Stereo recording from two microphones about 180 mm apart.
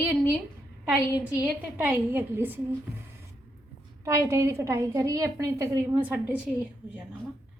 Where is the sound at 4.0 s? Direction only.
15° right (ahead or behind).